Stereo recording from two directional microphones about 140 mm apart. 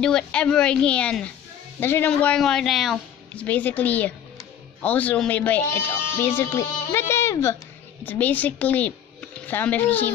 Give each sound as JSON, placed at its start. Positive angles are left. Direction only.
{"t": 0.0, "sound": "a woman's voice", "side_deg": 5}
{"t": 3.4, "sound": "speech", "side_deg": 10}